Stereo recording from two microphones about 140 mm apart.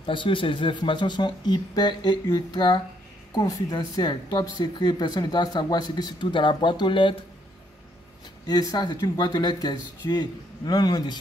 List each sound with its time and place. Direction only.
0.0 s speech: 35° left (ahead or behind)
8.5 s speech: 30° left (ahead or behind)